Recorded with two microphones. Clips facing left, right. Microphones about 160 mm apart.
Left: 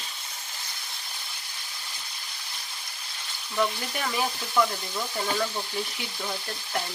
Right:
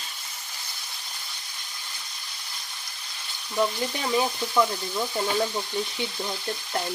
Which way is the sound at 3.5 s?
25° right (ahead or behind).